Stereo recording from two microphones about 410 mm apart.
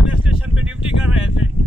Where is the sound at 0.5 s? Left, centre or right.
Centre.